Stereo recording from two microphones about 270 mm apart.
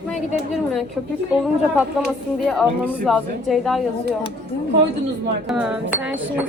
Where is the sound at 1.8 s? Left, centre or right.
Centre.